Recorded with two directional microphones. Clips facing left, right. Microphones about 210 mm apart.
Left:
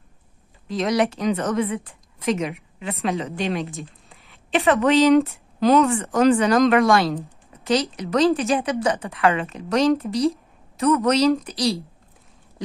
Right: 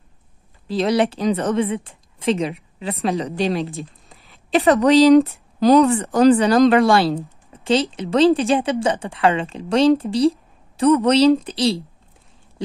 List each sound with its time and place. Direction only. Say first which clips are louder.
0.7 s a woman's voice: right 3 dB; 30° right (ahead or behind)